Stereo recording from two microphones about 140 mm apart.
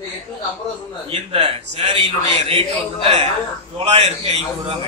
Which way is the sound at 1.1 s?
40° right (ahead or behind).